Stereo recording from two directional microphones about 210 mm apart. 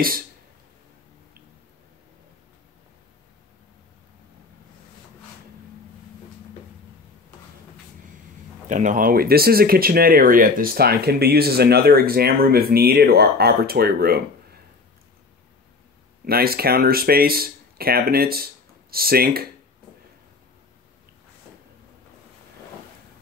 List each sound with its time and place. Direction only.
8.6 s speech: 35° right (ahead or behind)
16.3 s speech: 45° right (ahead or behind)